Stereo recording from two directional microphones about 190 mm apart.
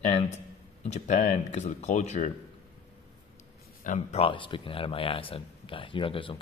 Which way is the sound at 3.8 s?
40° left (ahead or behind).